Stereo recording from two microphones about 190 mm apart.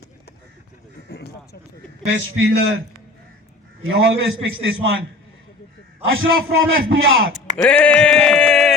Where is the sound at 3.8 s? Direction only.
80° right.